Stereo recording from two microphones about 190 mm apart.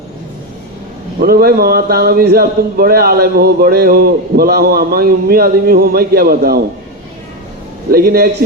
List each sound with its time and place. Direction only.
1.2 s a man's voice: 55° right (ahead or behind)
7.9 s a man's voice: 55° right (ahead or behind)